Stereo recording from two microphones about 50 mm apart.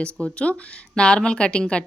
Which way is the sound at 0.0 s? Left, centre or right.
Left.